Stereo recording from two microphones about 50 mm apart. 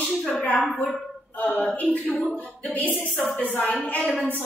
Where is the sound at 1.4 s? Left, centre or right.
Left.